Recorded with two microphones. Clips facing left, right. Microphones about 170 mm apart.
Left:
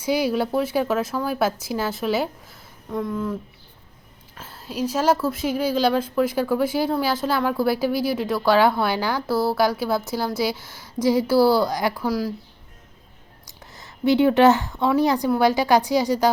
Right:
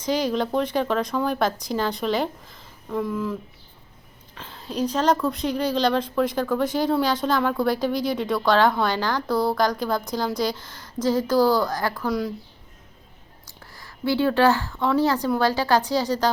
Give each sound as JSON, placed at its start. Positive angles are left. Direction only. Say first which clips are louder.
{"t": 0.0, "sound": "speech", "louder": "left 2 dB", "side_deg": 10}
{"t": 4.4, "sound": "speech", "louder": "right 1 dB", "side_deg": 5}
{"t": 13.7, "sound": "speech", "louder": "left 5 dB", "side_deg": 20}